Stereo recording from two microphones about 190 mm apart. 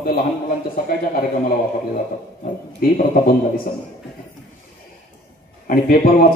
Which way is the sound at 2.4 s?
45° left (ahead or behind).